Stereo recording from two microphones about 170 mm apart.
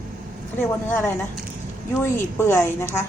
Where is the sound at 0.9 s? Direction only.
10° left (ahead or behind).